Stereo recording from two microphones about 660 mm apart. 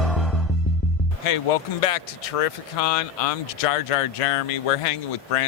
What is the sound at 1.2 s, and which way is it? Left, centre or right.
Speech, left.